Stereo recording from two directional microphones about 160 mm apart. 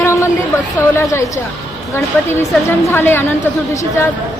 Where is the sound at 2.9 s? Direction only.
15° left (ahead or behind).